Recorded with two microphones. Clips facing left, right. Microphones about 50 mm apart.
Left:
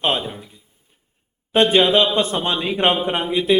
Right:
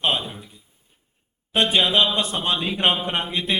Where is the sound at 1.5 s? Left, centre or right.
Left.